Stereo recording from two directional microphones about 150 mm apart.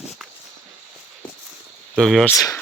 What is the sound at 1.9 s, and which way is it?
Speech, centre (ahead or behind).